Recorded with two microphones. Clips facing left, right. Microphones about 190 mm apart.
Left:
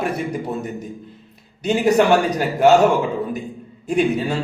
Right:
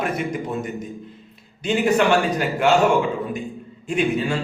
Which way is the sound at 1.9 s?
40° left (ahead or behind).